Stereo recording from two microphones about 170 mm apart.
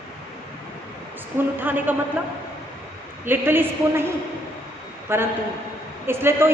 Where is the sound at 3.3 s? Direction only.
10° right (ahead or behind).